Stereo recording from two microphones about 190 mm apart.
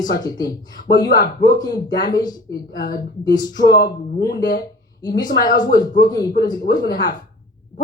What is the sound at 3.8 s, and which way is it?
Speech, 55° left (ahead or behind).